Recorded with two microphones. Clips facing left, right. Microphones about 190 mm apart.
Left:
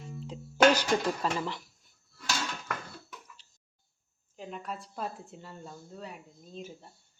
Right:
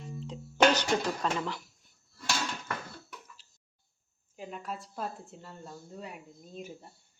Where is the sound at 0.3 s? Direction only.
10° left (ahead or behind).